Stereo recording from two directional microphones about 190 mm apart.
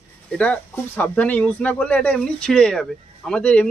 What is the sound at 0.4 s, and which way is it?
Speech, 10° left (ahead or behind).